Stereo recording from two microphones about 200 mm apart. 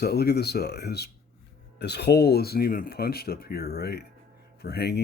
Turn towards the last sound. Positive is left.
turn(degrees=55)  # may be behind; listen again after turning